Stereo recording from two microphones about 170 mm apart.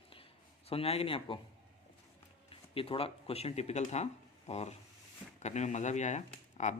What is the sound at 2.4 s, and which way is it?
Speech, 30° left (ahead or behind).